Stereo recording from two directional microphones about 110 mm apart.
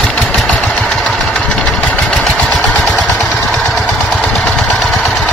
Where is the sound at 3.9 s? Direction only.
Centre (ahead or behind).